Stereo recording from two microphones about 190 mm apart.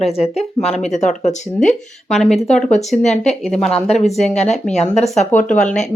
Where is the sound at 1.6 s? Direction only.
Centre (ahead or behind).